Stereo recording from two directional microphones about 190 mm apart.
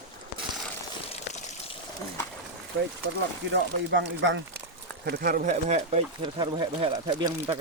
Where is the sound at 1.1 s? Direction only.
35° left (ahead or behind).